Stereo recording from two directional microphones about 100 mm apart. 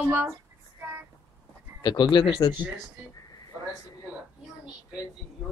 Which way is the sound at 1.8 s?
50° left (ahead or behind).